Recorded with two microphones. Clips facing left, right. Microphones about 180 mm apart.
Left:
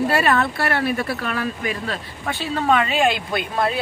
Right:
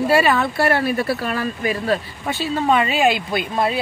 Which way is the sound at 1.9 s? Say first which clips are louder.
Right 6 dB; 5° right (ahead or behind).